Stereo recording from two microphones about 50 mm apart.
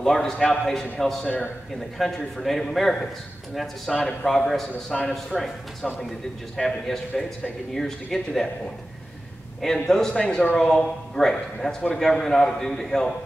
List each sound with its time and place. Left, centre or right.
0.0 s a man's voice: centre
9.6 s a man's voice: centre
10.2 s speech: left
10.6 s a man's voice: centre